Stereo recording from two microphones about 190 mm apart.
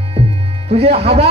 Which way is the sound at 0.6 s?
35° right (ahead or behind).